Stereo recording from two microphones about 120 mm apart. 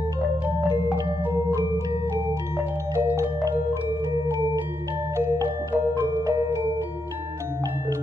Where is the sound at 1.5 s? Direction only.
30° right (ahead or behind).